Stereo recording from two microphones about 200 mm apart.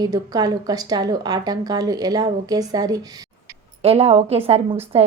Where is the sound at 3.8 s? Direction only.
30° right (ahead or behind).